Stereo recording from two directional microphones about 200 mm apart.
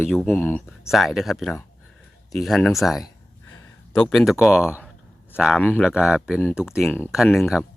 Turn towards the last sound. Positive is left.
turn(degrees=0)  # may be behind; listen again after turning